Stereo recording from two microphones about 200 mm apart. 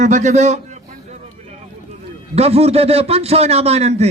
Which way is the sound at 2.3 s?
30° right (ahead or behind).